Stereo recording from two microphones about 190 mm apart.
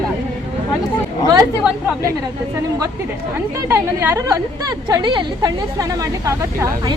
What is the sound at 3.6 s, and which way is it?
A woman's voice, 10° right (ahead or behind).